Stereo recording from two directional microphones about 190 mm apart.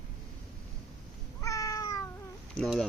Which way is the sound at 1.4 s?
15° left (ahead or behind).